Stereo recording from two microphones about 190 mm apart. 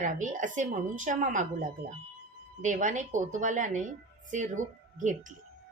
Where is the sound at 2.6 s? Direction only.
40° right (ahead or behind).